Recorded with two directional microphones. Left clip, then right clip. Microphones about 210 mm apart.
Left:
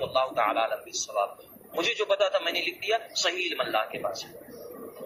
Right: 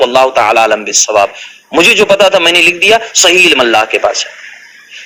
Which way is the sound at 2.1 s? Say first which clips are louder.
Right 18 dB; 35° right (ahead or behind).